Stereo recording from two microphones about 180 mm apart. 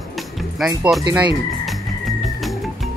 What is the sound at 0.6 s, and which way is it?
Speech, centre (ahead or behind).